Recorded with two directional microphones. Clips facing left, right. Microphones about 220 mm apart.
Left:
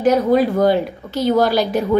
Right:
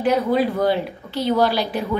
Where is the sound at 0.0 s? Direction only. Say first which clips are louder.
Left 4 dB; 45° left (ahead or behind).